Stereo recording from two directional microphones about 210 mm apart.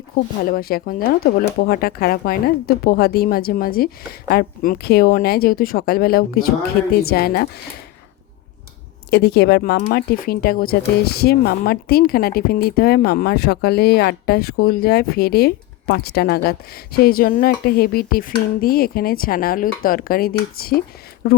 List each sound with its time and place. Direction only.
0.5 s speech: 45° left (ahead or behind)
9.0 s speech: 50° left (ahead or behind)